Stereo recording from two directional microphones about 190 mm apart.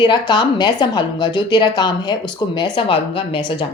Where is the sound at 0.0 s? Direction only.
25° left (ahead or behind).